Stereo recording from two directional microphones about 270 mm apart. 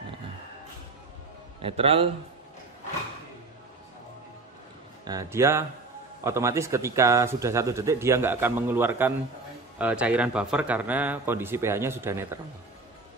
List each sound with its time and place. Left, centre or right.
1.6 s a man's voice: right
5.0 s a man's voice: centre